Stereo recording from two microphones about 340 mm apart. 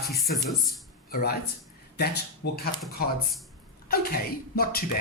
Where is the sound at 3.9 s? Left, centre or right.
Left.